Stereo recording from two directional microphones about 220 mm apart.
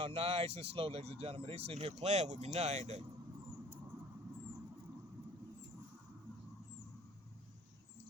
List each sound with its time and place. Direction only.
0.0 s speech: 25° right (ahead or behind)